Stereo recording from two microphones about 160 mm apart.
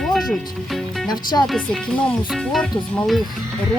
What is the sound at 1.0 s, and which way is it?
Speech, 25° left (ahead or behind).